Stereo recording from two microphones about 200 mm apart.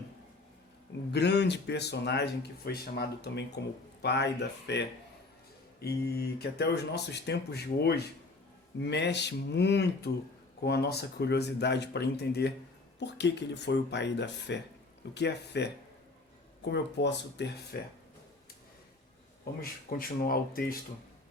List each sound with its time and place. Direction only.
1.1 s speech: 60° left (ahead or behind)
20.0 s speech: 45° left (ahead or behind)